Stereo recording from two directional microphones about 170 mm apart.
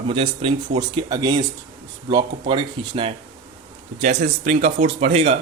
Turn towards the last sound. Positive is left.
turn(degrees=-35)  # may be behind; listen again after turning